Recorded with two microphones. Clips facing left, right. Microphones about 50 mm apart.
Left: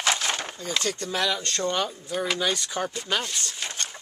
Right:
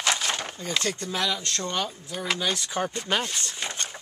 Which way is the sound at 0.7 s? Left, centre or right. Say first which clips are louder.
Even; centre.